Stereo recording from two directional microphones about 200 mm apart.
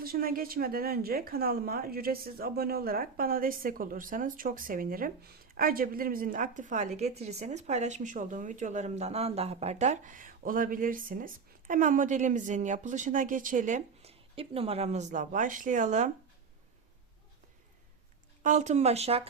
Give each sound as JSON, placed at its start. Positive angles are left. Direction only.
{"t": 0.0, "sound": "speech", "side_deg": -50}
{"t": 18.4, "sound": "speech", "side_deg": -35}